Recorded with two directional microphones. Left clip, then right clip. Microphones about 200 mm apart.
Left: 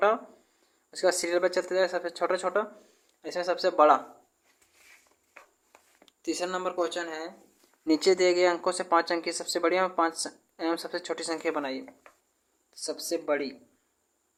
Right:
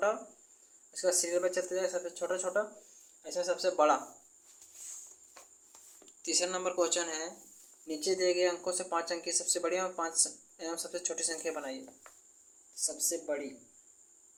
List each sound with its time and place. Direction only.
0.9 s speech: 40° left (ahead or behind)
6.1 s speech: 30° left (ahead or behind)
7.9 s speech: 40° left (ahead or behind)
12.8 s speech: 40° left (ahead or behind)